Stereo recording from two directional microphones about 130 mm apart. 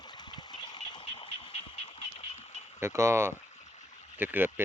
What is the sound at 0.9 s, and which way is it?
Vehicle, 40° left (ahead or behind).